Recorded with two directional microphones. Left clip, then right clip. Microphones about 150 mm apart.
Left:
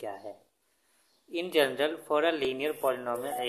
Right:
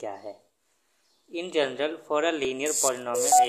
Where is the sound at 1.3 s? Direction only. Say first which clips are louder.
Even; centre (ahead or behind).